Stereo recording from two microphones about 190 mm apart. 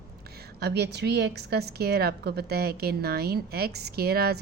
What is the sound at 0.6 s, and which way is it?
A woman's voice, 60° right (ahead or behind).